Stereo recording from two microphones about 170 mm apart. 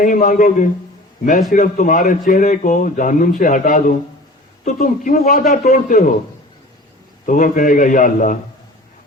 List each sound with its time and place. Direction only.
0.0 s a man's voice: 50° left (ahead or behind)
5.6 s a man's voice: 50° left (ahead or behind)
7.3 s a man's voice: 50° left (ahead or behind)